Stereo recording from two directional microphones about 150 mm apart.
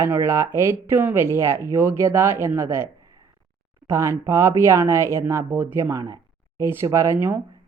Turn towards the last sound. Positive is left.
turn(degrees=-15)  # may be behind; listen again after turning